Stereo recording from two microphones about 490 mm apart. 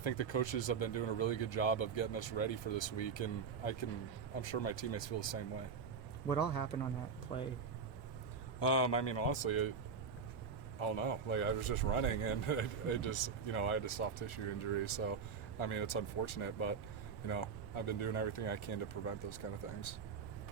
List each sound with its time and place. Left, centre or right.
0.0 s speech: left
8.5 s speech: left
10.8 s speech: left